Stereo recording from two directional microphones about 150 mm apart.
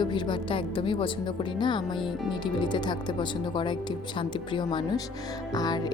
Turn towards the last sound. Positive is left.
turn(degrees=25)  # may be behind; listen again after turning